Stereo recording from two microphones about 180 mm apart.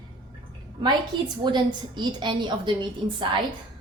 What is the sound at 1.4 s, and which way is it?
A woman's voice, 25° right (ahead or behind).